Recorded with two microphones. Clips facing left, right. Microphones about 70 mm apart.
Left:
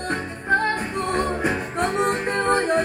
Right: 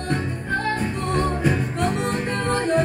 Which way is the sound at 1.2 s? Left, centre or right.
Left.